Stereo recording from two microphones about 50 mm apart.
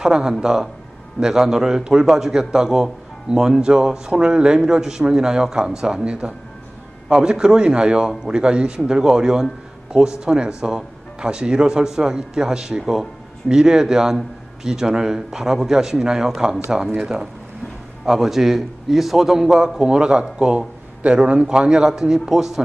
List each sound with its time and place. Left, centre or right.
0.0 s a man's voice: centre